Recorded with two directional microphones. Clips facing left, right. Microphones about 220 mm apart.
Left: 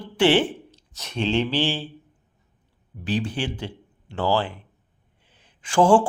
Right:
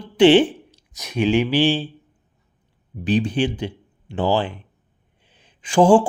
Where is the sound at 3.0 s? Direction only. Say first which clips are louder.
Right 6 dB; 15° right (ahead or behind).